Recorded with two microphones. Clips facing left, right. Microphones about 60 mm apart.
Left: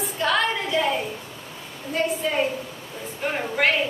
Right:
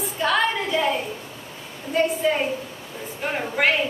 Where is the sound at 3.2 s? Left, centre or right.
Centre.